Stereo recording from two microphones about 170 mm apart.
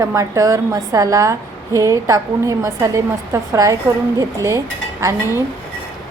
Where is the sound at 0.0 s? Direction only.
20° right (ahead or behind).